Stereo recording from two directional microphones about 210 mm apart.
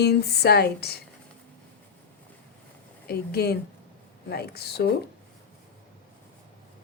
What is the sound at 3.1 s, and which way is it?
Speech, 50° left (ahead or behind).